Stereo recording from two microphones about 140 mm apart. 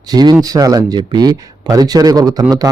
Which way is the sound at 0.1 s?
30° right (ahead or behind).